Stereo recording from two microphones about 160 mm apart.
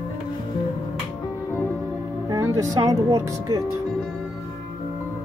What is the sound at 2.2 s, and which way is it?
Speech, 20° right (ahead or behind).